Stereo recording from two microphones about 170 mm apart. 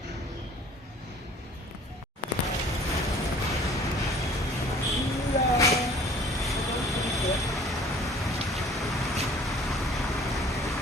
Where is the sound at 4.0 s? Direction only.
Centre (ahead or behind).